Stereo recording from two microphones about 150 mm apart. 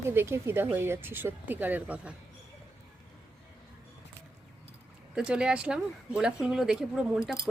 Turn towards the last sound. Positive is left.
turn(degrees=-5)  # may be behind; listen again after turning